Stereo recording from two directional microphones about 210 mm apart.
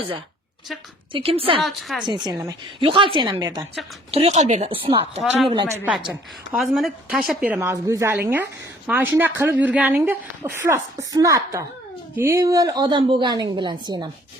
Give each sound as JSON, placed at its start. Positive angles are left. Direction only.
{"t": 1.1, "sound": "a woman's voice", "side_deg": -25}
{"t": 1.6, "sound": "a woman's voice", "side_deg": 0}
{"t": 2.0, "sound": "a woman's voice", "side_deg": -20}
{"t": 4.1, "sound": "a woman's voice", "side_deg": -30}
{"t": 6.1, "sound": "a woman's voice", "side_deg": 0}